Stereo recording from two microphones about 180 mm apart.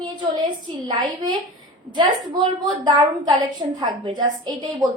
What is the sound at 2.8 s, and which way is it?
A woman's voice, 20° right (ahead or behind).